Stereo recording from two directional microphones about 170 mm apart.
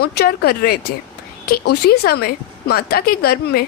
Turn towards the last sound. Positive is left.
turn(degrees=65)  # may be behind; listen again after turning